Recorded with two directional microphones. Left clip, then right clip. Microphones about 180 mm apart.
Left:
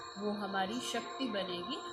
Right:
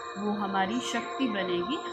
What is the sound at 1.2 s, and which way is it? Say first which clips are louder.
Speech: right 8 dB; 15° right (ahead or behind).